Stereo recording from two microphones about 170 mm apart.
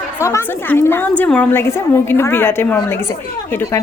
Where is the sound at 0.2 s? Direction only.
15° left (ahead or behind).